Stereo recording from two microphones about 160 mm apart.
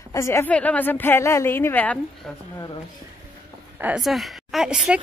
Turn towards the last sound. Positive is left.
turn(degrees=-5)  # may be behind; listen again after turning